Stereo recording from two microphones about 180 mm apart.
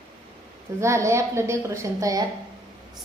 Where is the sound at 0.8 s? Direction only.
15° right (ahead or behind).